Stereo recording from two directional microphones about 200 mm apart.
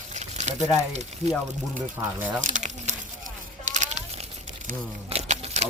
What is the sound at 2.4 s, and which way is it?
Crumpling, 40° right (ahead or behind).